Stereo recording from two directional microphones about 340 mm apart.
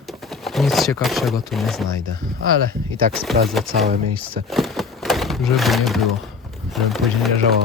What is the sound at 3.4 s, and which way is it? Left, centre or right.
Speech, centre.